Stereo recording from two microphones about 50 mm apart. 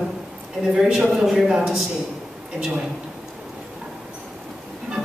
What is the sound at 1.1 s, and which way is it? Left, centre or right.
Speech, centre.